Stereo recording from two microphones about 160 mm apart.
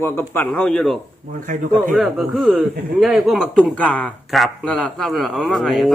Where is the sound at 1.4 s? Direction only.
55° right (ahead or behind).